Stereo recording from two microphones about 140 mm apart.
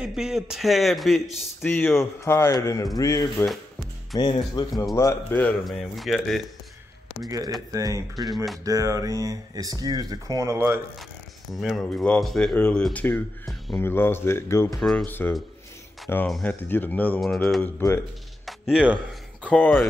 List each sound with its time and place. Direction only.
0.0 s a man's voice: 5° right (ahead or behind); by 3.4 s 25° left (ahead or behind)
4.2 s speech: 35° left (ahead or behind)
4.9 s speech: 20° left (ahead or behind)
5.7 s a man's voice: centre (ahead or behind)
7.2 s speech: 25° right (ahead or behind)
11.6 s a man's voice: centre (ahead or behind); by 14.8 s 20° left (ahead or behind)
14.8 s a man's voice: centre (ahead or behind)
15.0 s speech: 15° left (ahead or behind)
17.7 s speech: 15° left (ahead or behind)
18.4 s music: centre (ahead or behind)